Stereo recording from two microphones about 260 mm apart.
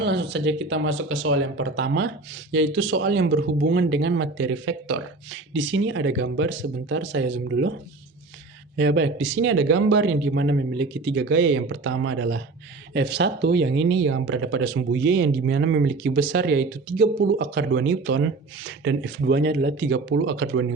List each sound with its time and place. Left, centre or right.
0.0 s speech: right